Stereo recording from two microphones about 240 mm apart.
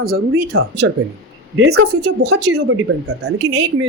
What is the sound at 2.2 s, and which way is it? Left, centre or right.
Speech, right.